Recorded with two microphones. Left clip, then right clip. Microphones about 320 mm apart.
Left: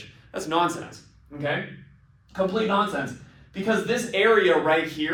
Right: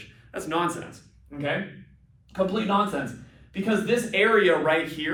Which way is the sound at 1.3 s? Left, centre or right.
Centre.